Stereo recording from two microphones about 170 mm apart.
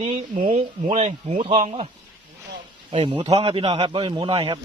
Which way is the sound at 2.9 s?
30° right (ahead or behind).